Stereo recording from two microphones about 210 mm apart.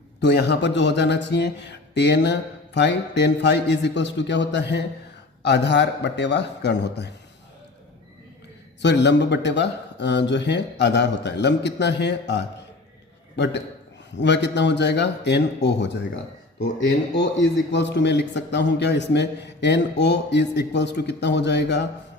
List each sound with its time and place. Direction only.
0.2 s speech: 50° left (ahead or behind)
8.8 s a man's voice: 55° left (ahead or behind)
17.7 s speech: 55° left (ahead or behind)